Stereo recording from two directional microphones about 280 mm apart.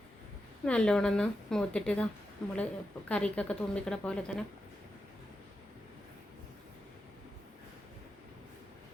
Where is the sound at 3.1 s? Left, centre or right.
Centre.